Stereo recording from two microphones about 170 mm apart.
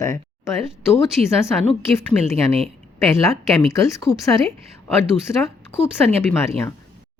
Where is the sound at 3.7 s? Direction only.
20° left (ahead or behind).